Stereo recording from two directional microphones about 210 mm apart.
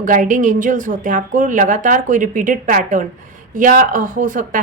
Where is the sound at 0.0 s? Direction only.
40° right (ahead or behind).